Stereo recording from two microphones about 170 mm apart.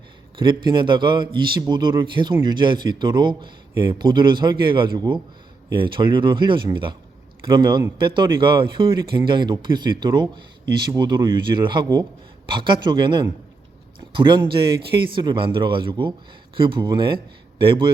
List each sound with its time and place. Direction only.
0.3 s a man's voice: 25° right (ahead or behind)